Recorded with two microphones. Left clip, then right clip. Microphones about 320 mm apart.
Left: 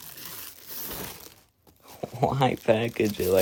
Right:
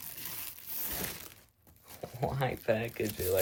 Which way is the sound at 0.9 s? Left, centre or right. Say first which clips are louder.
Left 1 dB; centre.